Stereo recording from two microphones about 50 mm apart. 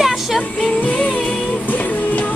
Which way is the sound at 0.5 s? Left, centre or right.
Left.